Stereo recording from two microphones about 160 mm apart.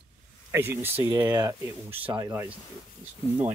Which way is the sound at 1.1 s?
25° right (ahead or behind).